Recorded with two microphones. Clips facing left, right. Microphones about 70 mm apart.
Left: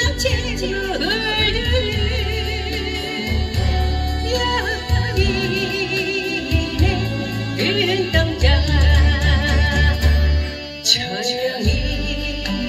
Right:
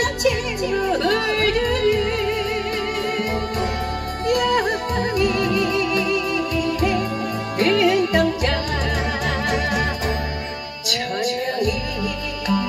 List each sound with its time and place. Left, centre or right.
0.0 s music: left
1.0 s music: right
1.3 s music: left
4.3 s music: left
5.3 s music: right
7.5 s music: right
9.2 s music: left
10.9 s music: left